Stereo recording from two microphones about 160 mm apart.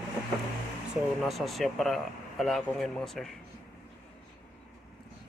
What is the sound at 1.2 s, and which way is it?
Speech, centre (ahead or behind).